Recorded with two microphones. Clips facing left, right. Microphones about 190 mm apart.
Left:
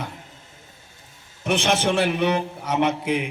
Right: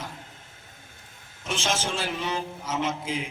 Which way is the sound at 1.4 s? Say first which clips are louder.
Left 8 dB; 65° left (ahead or behind).